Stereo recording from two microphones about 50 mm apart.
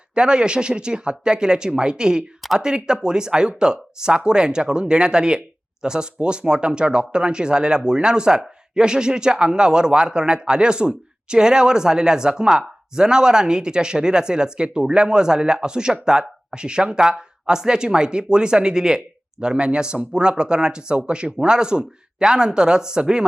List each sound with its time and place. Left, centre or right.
0.1 s speech: centre